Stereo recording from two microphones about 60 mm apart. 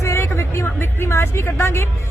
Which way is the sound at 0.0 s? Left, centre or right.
Left.